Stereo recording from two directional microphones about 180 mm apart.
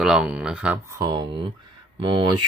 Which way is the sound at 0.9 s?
25° right (ahead or behind).